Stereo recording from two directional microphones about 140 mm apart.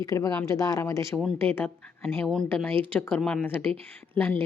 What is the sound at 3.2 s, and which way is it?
Speech, centre (ahead or behind).